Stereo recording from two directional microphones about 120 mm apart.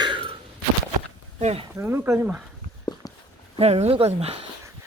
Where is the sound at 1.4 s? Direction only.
65° right (ahead or behind).